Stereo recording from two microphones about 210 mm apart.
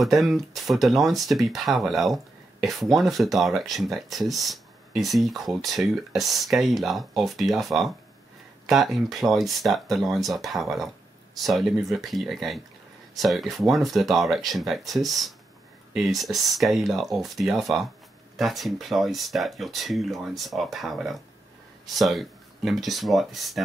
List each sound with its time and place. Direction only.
0.0 s speech: centre (ahead or behind)